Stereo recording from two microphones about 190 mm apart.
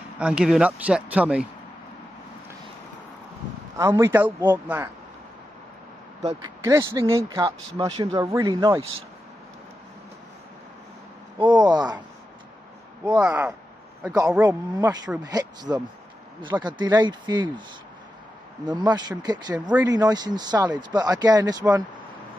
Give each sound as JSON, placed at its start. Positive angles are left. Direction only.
{"t": 0.2, "sound": "speech", "side_deg": -5}
{"t": 3.7, "sound": "speech", "side_deg": -15}
{"t": 6.4, "sound": "speech", "side_deg": -15}
{"t": 11.3, "sound": "speech", "side_deg": -25}
{"t": 13.2, "sound": "speech", "side_deg": -10}
{"t": 18.7, "sound": "speech", "side_deg": -20}